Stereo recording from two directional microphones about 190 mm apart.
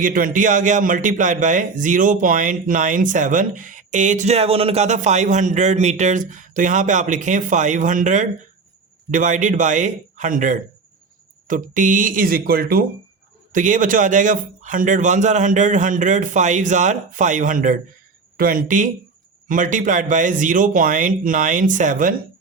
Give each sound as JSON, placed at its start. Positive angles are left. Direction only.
{"t": 0.0, "sound": "speech", "side_deg": -45}